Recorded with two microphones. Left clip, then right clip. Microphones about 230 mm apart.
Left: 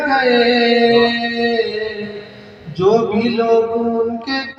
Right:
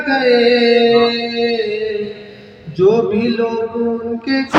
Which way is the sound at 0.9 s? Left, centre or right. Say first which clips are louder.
Right 1 dB; centre.